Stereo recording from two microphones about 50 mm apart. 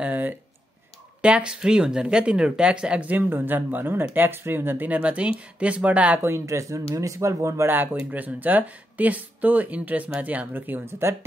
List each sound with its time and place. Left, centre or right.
0.0 s a sound: right
1.2 s speech: right
3.2 s speech: right
6.4 s speech: right
7.6 s speech: right
10.9 s speech: right